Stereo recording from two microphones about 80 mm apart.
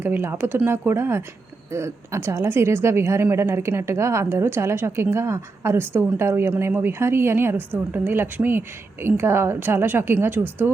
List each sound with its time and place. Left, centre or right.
0.0 s a woman's voice: right